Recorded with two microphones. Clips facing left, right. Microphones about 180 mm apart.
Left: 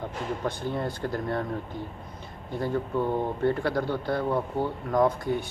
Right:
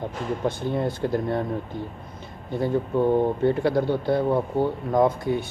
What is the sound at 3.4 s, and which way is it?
Speech, 20° right (ahead or behind).